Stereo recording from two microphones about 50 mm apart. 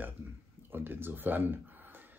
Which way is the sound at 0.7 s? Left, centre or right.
Right.